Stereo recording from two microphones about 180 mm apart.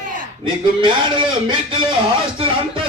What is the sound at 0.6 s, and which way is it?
A man's voice, 25° right (ahead or behind).